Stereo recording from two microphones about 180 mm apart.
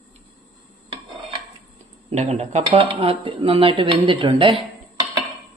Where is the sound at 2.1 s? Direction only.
40° right (ahead or behind).